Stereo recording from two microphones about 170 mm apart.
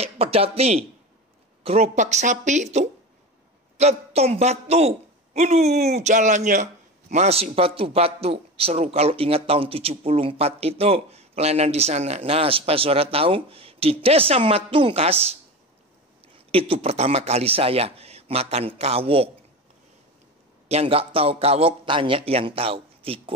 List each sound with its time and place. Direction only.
0.0 s a man's voice: 35° right (ahead or behind)
16.5 s a man's voice: 35° right (ahead or behind)
20.6 s a man's voice: 35° right (ahead or behind)